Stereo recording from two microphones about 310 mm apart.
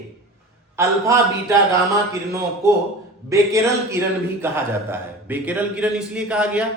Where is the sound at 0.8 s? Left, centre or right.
Centre.